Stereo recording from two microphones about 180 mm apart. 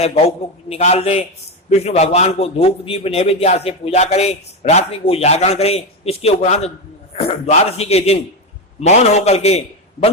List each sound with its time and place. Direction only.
0.7 s a man's voice: 35° left (ahead or behind)